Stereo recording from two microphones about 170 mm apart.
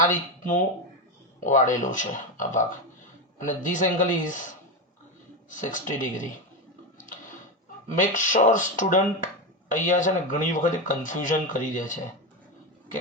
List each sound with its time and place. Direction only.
0.0 s speech: 50° left (ahead or behind)
5.6 s speech: 50° left (ahead or behind)
7.9 s speech: 50° left (ahead or behind)